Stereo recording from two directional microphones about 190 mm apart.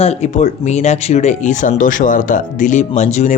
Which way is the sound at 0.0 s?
35° left (ahead or behind).